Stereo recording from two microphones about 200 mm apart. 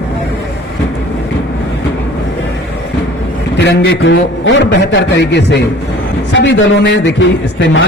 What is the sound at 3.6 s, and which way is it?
A man's voice, 65° left (ahead or behind).